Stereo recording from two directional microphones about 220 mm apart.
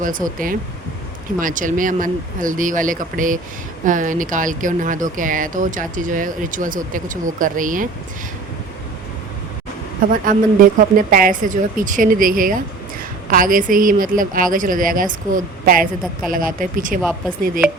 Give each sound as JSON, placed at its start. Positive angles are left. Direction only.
{"t": 0.3, "sound": "speech", "side_deg": -40}
{"t": 10.1, "sound": "speech", "side_deg": -40}